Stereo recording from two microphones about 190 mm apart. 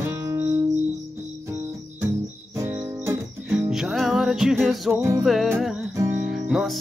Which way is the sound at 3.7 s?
Centre (ahead or behind).